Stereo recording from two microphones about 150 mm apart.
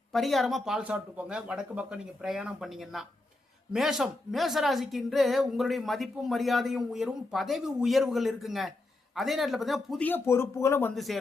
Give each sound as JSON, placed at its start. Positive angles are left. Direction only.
{"t": 0.1, "sound": "a woman's voice", "side_deg": 0}
{"t": 10.0, "sound": "speech", "side_deg": 15}
{"t": 10.9, "sound": "a woman's voice", "side_deg": 0}